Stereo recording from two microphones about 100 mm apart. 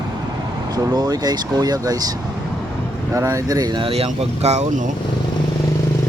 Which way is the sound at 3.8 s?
80° right.